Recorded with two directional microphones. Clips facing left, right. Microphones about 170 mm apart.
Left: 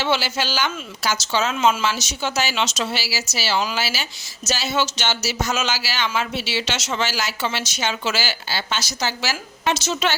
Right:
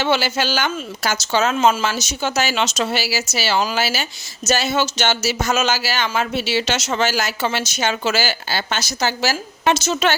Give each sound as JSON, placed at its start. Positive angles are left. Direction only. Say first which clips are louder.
{"t": 0.0, "sound": "speech", "louder": "right 3 dB", "side_deg": -50}